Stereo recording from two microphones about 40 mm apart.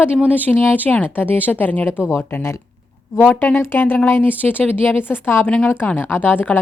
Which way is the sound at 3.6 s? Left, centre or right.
Left.